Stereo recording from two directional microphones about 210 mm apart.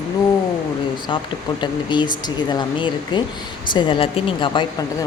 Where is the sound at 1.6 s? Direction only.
20° left (ahead or behind).